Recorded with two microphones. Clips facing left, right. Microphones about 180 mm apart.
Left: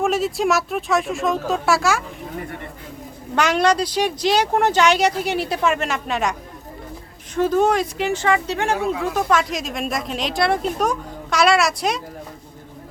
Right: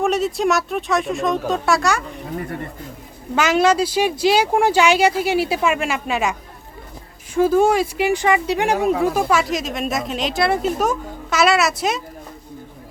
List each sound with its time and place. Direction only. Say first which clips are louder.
0.0 s speech: right 1 dB; centre (ahead or behind)
3.3 s speech: right 2 dB; 5° right (ahead or behind)
7.3 s speech: right 2 dB; 10° right (ahead or behind)
8.8 s speech: right 5 dB; 40° right (ahead or behind)
9.1 s speech: right 1 dB; 5° right (ahead or behind)